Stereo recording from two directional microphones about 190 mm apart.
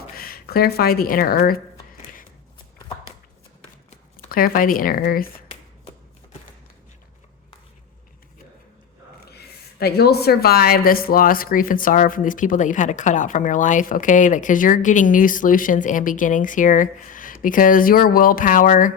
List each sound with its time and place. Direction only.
0.2 s speech: 50° left (ahead or behind)
4.3 s a woman's voice: 50° left (ahead or behind)
9.2 s a woman's voice: 55° left (ahead or behind)